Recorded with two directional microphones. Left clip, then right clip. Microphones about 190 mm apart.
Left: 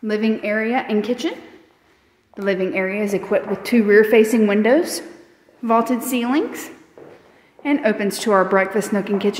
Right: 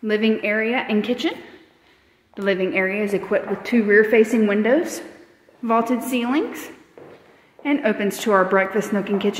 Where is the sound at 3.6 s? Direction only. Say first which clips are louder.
Left 2 dB; 25° left (ahead or behind).